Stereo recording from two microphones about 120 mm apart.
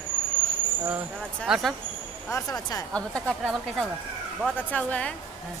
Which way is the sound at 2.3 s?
30° left (ahead or behind).